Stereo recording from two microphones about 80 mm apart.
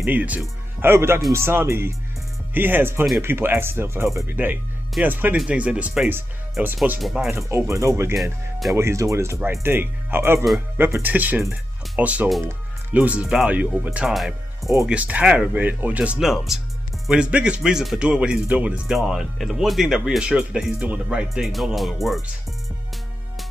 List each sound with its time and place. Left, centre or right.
0.0 s speech: right
4.3 s speech: right
7.0 s speech: centre
7.2 s speech: right
8.2 s speech: centre
8.7 s speech: right; by 13.8 s centre
13.9 s speech: centre
14.9 s speech: centre
16.2 s speech: centre
18.9 s speech: centre
21.3 s speech: centre